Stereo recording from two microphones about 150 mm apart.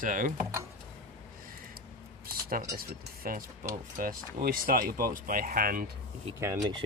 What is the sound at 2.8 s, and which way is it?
Speech, 75° right (ahead or behind).